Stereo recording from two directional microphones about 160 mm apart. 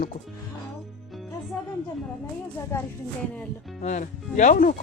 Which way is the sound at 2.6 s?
15° left (ahead or behind).